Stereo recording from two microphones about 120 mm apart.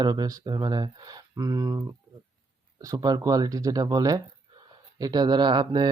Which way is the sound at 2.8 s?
30° right (ahead or behind).